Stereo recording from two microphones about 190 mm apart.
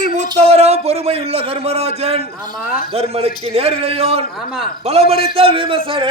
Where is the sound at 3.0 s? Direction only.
30° right (ahead or behind).